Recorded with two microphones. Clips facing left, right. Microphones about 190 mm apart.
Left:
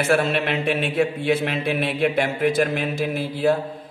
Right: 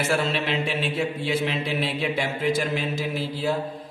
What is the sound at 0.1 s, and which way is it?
A man's voice, 55° left (ahead or behind).